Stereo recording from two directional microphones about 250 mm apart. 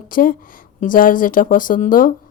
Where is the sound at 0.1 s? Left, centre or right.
Left.